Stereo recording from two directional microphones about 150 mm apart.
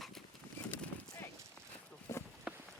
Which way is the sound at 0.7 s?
15° left (ahead or behind).